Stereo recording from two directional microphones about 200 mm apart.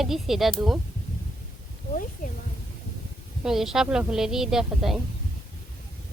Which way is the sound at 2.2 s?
40° left (ahead or behind).